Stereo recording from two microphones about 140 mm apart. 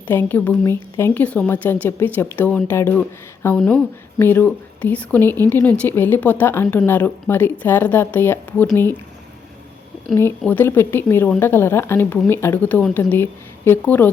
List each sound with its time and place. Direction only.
0.1 s speech: 15° left (ahead or behind)
3.6 s speech: centre (ahead or behind)
4.2 s speech: 15° left (ahead or behind)
10.2 s speech: 15° left (ahead or behind)